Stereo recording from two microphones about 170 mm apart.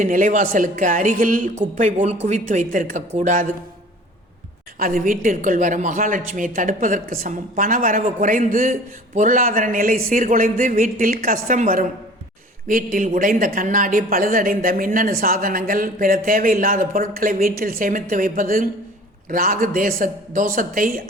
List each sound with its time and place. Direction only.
0.0 s a woman's voice: 50° right (ahead or behind)
4.8 s a woman's voice: 55° right (ahead or behind)